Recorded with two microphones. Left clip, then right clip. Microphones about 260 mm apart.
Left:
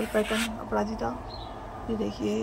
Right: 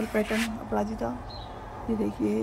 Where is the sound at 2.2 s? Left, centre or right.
Centre.